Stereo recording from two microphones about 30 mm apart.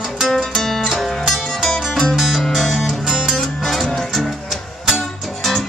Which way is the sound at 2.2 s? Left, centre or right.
Centre.